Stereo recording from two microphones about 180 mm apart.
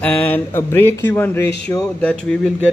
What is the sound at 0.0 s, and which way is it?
Speech, 10° left (ahead or behind).